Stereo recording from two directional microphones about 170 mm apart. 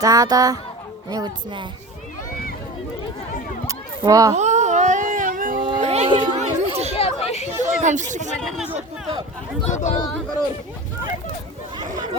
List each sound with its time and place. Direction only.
0.0 s speech: 20° right (ahead or behind)
3.7 s a sound: 20° right (ahead or behind)
4.4 s a sound: 45° right (ahead or behind)
5.8 s a sound: 40° right (ahead or behind)
6.1 s chatter: 40° right (ahead or behind)
6.9 s chatter: 35° left (ahead or behind)
7.6 s speech: 45° right (ahead or behind)
8.4 s speech: centre (ahead or behind)
9.6 s speech: 40° left (ahead or behind)